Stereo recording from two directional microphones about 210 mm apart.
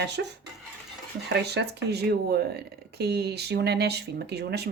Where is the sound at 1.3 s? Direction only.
50° right (ahead or behind).